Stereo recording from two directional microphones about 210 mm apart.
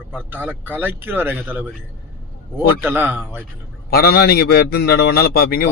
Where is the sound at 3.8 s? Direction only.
45° left (ahead or behind).